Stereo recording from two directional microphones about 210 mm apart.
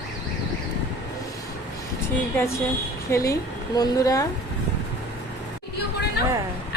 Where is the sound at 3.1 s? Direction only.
15° left (ahead or behind).